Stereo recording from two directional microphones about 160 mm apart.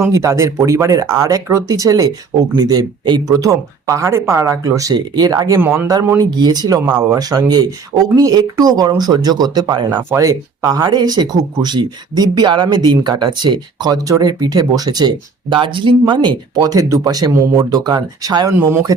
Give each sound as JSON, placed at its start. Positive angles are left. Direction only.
{"t": 0.0, "sound": "speech", "side_deg": -20}
{"t": 18.5, "sound": "speech", "side_deg": -10}